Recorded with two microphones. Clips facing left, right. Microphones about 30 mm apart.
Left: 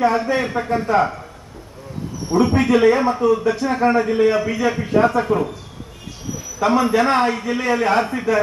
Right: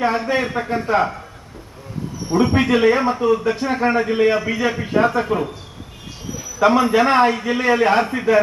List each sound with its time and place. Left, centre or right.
0.0 s a man's voice: centre
2.3 s a man's voice: centre
6.6 s a man's voice: centre